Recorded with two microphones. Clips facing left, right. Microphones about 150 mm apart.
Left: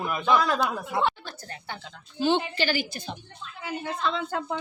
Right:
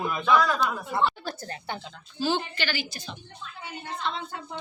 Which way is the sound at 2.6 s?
45° left (ahead or behind).